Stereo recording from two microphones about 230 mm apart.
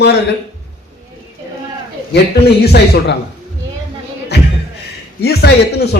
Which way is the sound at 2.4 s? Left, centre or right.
Left.